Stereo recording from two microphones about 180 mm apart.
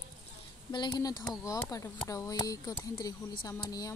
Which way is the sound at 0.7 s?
25° left (ahead or behind).